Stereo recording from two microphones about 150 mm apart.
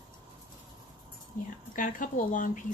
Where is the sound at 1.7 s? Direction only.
65° left (ahead or behind).